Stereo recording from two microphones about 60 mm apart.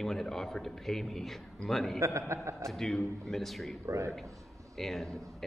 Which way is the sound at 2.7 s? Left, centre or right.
Centre.